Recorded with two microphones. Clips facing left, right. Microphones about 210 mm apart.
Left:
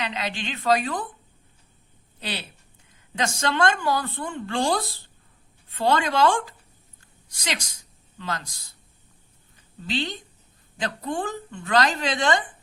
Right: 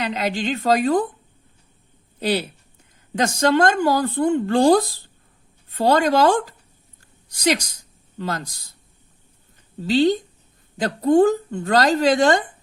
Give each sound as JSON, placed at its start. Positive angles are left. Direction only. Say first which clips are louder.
{"t": 0.0, "sound": "speech", "louder": "right 7 dB", "side_deg": -40}
{"t": 3.2, "sound": "speech", "louder": "right 7 dB", "side_deg": -40}
{"t": 7.0, "sound": "a sound", "louder": "right 15 dB", "side_deg": -40}
{"t": 8.2, "sound": "speech", "louder": "right 5 dB", "side_deg": -40}
{"t": 9.8, "sound": "speech", "louder": "right 12 dB", "side_deg": -40}